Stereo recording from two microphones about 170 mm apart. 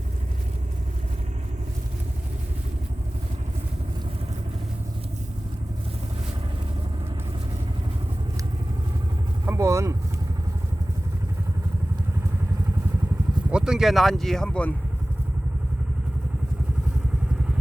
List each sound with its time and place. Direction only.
9.5 s vehicle: 15° right (ahead or behind)
13.5 s speech: 5° right (ahead or behind)